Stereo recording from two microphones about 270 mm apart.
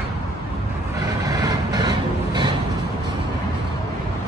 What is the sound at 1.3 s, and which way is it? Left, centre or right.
Vehicle, centre.